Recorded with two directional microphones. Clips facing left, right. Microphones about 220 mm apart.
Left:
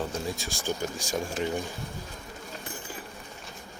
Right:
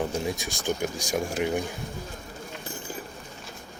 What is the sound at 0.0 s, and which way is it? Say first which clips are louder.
Speech: right 4 dB; 20° right (ahead or behind).